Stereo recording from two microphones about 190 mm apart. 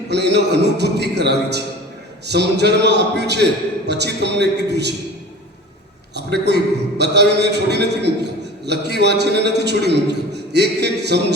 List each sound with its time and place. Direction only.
0.1 s a man's voice: 60° right (ahead or behind)
6.1 s a man's voice: 60° right (ahead or behind)